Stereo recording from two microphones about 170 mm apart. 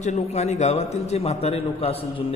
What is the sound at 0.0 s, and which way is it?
A man's voice, 45° left (ahead or behind).